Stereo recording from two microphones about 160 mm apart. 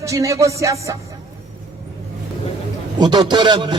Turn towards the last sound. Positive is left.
turn(degrees=-30)  # may be behind; listen again after turning